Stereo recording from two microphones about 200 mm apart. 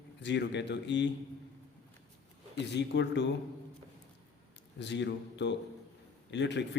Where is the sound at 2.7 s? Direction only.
60° left (ahead or behind).